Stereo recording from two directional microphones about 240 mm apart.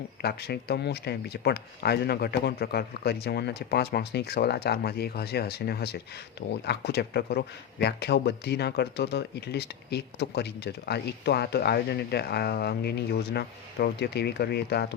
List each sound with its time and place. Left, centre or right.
0.2 s speech: left